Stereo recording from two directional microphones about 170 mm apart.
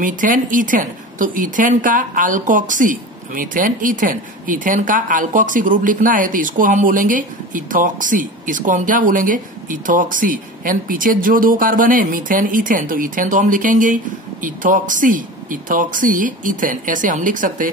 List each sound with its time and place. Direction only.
0.0 s speech: 50° right (ahead or behind)